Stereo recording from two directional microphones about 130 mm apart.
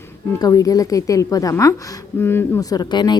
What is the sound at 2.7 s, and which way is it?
Speech, 35° left (ahead or behind).